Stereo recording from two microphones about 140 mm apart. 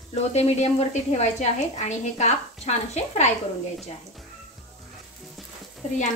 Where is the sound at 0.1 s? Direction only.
50° left (ahead or behind).